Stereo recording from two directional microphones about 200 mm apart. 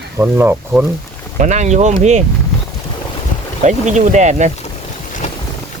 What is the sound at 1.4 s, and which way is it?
Speech, 35° right (ahead or behind).